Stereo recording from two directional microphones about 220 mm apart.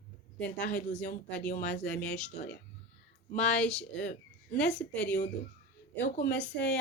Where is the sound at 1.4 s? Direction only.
35° left (ahead or behind).